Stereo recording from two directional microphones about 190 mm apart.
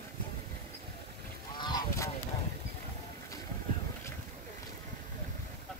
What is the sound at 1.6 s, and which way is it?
Goose, 20° left (ahead or behind).